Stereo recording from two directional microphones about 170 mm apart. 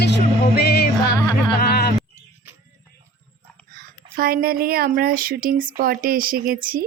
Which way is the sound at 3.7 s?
60° right (ahead or behind).